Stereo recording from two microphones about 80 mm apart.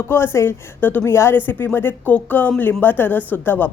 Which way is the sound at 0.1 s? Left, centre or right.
Left.